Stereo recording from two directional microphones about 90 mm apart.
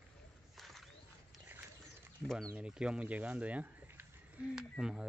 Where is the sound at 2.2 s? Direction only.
5° left (ahead or behind).